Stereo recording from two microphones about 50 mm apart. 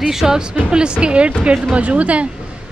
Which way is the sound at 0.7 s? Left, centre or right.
Centre.